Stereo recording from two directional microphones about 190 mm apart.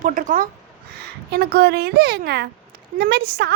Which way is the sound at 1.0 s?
55° right (ahead or behind).